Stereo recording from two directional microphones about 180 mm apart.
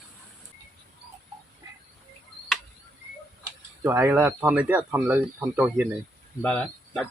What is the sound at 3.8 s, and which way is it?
Speech, 15° right (ahead or behind).